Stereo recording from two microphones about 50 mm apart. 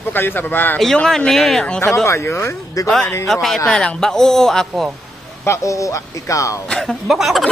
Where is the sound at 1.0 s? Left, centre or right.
Centre.